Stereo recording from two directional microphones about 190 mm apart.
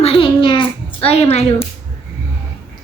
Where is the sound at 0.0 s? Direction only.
30° left (ahead or behind).